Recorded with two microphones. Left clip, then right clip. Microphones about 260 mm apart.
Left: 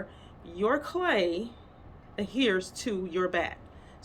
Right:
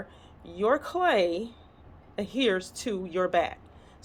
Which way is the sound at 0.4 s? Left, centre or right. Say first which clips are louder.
Right 2 dB; right.